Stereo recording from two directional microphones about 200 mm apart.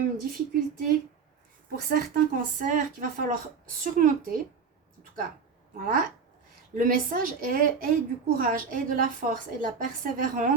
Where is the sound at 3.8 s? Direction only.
40° right (ahead or behind).